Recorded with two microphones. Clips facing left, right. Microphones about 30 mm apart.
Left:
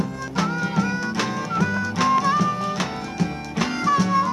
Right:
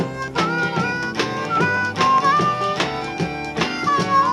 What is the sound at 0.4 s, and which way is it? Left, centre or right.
Music, right.